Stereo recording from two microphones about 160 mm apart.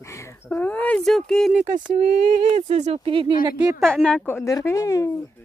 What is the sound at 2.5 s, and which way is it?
Speech, 45° right (ahead or behind).